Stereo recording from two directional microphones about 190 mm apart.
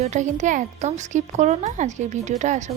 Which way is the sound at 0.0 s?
40° right (ahead or behind).